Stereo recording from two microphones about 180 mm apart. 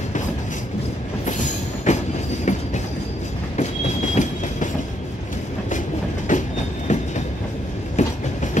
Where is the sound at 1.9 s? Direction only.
40° left (ahead or behind).